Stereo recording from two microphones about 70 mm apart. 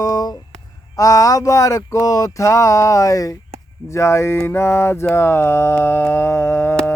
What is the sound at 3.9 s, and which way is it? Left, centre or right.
Speech, left.